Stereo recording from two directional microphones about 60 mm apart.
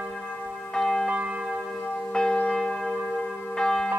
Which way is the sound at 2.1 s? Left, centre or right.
Centre.